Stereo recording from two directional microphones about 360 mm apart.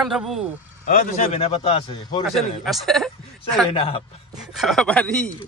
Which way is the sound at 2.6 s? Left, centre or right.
Centre.